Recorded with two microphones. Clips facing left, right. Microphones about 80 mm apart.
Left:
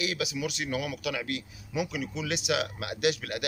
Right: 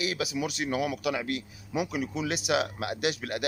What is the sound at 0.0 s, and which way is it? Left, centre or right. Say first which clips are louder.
A man's voice: right 1 dB; right.